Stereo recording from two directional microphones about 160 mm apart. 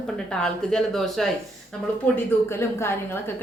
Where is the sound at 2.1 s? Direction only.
15° left (ahead or behind).